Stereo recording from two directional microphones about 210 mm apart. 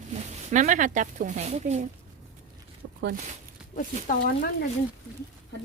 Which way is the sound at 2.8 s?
60° right (ahead or behind).